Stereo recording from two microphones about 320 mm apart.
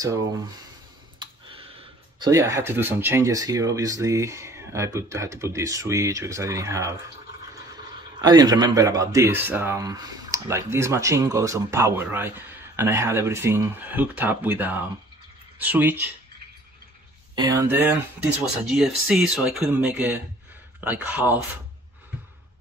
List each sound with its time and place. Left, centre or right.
1.2 s speech: centre
8.2 s speech: centre
17.4 s speech: centre